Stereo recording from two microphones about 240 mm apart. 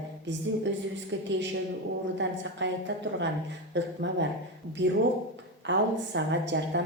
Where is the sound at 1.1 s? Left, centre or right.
Right.